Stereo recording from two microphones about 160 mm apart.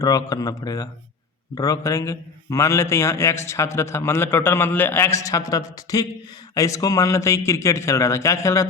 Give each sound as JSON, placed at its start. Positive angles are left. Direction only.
{"t": 0.0, "sound": "a man's voice", "side_deg": 20}